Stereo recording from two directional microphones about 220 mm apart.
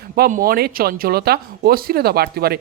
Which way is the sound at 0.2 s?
40° right (ahead or behind).